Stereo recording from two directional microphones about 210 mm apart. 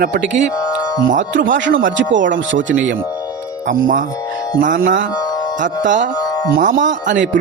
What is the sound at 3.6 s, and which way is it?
Speech, 40° right (ahead or behind).